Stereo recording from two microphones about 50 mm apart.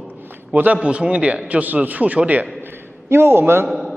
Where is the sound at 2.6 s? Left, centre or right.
Right.